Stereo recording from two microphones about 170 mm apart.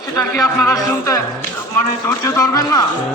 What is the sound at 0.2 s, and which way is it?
Speech, 15° left (ahead or behind).